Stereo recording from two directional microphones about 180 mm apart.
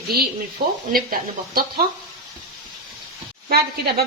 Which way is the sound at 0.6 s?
30° right (ahead or behind).